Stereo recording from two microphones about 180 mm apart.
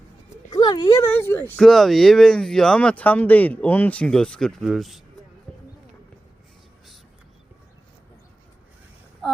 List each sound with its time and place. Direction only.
0.5 s speech: 20° left (ahead or behind)
1.5 s speech: centre (ahead or behind)
5.5 s a sound: centre (ahead or behind)